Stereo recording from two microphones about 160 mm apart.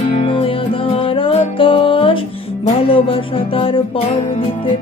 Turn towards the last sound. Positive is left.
turn(degrees=35)  # may be behind; listen again after turning